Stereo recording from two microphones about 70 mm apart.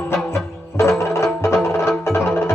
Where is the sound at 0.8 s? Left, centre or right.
Left.